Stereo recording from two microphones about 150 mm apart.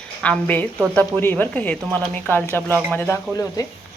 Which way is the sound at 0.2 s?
10° left (ahead or behind).